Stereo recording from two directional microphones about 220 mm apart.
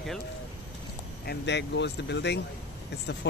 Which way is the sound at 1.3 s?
50° left (ahead or behind).